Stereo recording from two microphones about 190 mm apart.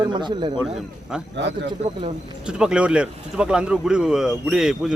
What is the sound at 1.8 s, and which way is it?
Speech, 35° right (ahead or behind).